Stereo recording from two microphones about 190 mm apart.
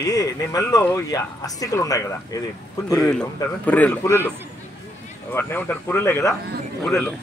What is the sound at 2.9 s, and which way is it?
Speech, 5° left (ahead or behind).